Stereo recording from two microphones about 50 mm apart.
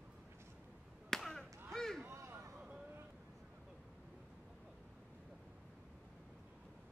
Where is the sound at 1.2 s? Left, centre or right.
Centre.